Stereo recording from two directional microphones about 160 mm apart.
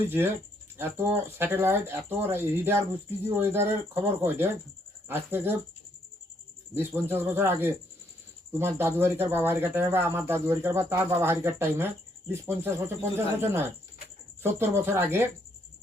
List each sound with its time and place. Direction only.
0.1 s speech: 15° right (ahead or behind)
6.7 s speech: 15° right (ahead or behind)